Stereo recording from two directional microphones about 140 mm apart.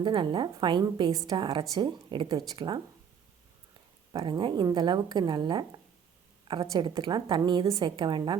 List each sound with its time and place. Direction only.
0.0 s a woman's voice: 35° right (ahead or behind)
4.1 s a woman's voice: 35° right (ahead or behind)